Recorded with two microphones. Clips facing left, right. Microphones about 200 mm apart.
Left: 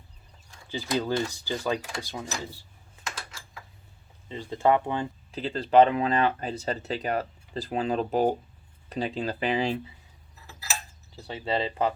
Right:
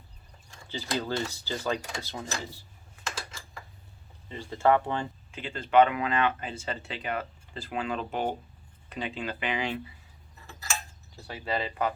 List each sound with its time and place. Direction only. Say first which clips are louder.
0.7 s speech: left 4 dB; 15° left (ahead or behind)
4.3 s speech: left 1 dB; 20° left (ahead or behind)
5.3 s speech: left 3 dB; 35° left (ahead or behind)
10.4 s tick-tock: even; 5° left (ahead or behind)
11.3 s speech: left 3 dB; 25° left (ahead or behind)